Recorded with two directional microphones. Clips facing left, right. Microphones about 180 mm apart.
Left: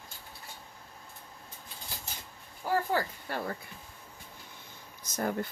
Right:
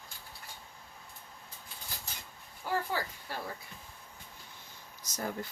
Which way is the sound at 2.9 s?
55° left (ahead or behind).